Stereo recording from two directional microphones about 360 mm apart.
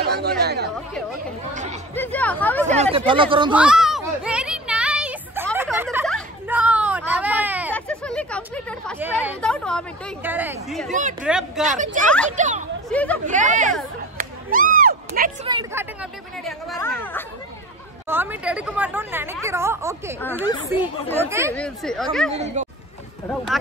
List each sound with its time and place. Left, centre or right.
0.0 s chatter: right
0.4 s speech: right
2.0 s speech: centre
2.6 s speech: centre
3.6 s children playing: centre
10.9 s speech: right
11.2 s speech: centre
11.6 s speech: right
12.9 s speech: centre
13.3 s speech: right
14.1 s a sound: right
15.4 s speech: centre
18.0 s speech: centre
22.3 s speech: centre